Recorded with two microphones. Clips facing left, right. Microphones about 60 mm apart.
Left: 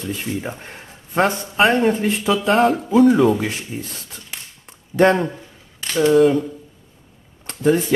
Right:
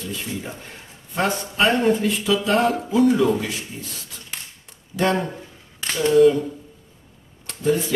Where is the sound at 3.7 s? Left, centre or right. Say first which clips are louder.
Left 6 dB; left.